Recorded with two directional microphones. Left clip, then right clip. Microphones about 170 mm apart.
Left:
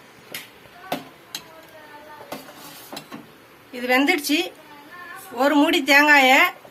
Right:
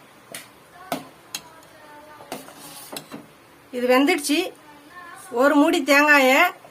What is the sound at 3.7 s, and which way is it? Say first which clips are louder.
A woman's voice: right 1 dB; 40° right (ahead or behind).